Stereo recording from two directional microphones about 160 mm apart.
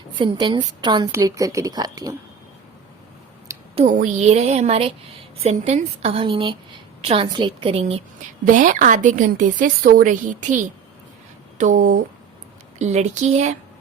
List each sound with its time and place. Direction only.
0.2 s speech: 30° right (ahead or behind)
3.5 s a sound: 20° right (ahead or behind)
3.8 s a woman's voice: 50° right (ahead or behind)
8.4 s a woman's voice: 55° right (ahead or behind)